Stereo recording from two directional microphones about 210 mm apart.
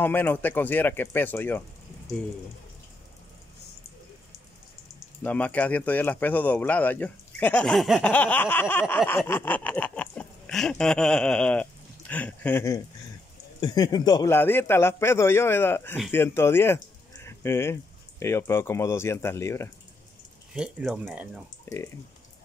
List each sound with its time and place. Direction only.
0.0 s speech: 10° left (ahead or behind)
5.2 s speech: 5° left (ahead or behind)
20.5 s speech: 5° right (ahead or behind)
21.6 s speech: 15° left (ahead or behind)